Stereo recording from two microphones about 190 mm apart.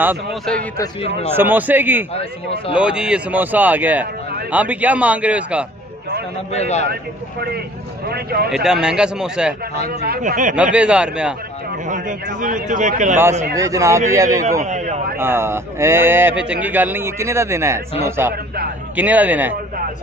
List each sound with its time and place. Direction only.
1.3 s speech: 10° right (ahead or behind)
2.1 s speech: 30° left (ahead or behind)
2.8 s speech: 5° right (ahead or behind)
6.5 s a man's voice: 35° left (ahead or behind)
6.9 s speech: 55° right (ahead or behind)
8.8 s a man's voice: 5° right (ahead or behind)
9.8 s a man's voice: 55° right (ahead or behind)
10.5 s a man's voice: 5° right (ahead or behind)
11.9 s a man's voice: 40° right (ahead or behind)
13.2 s speech: 15° right (ahead or behind)
14.6 s a sound: 40° right (ahead or behind)
15.1 s speech: 10° right (ahead or behind)